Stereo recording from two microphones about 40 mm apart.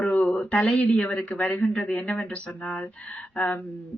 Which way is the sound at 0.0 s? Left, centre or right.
Left.